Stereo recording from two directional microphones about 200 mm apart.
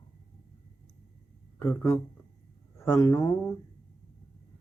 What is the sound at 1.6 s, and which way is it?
Speech, 15° left (ahead or behind).